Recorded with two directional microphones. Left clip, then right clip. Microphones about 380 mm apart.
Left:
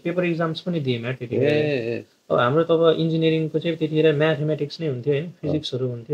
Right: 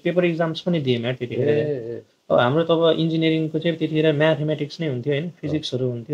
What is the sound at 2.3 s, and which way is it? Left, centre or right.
Speech, centre.